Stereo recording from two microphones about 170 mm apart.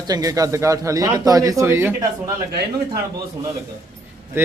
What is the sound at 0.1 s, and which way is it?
A man's voice, 20° right (ahead or behind).